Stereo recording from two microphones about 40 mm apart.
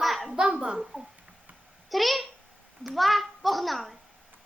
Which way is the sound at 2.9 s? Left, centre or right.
Centre.